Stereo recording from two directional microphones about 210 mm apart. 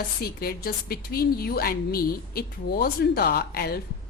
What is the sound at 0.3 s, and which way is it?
A woman's voice, 45° left (ahead or behind).